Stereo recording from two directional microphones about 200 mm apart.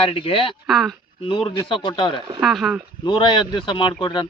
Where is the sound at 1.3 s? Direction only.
25° left (ahead or behind).